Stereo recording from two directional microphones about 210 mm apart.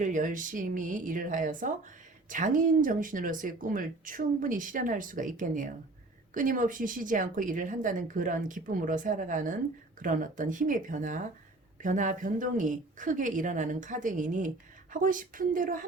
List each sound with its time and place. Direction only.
0.0 s speech: 35° right (ahead or behind)